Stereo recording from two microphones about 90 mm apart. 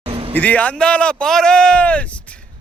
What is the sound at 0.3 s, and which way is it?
Speech, 15° left (ahead or behind).